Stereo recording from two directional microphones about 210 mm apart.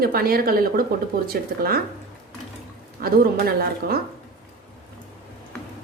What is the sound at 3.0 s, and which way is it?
Speech, 45° right (ahead or behind).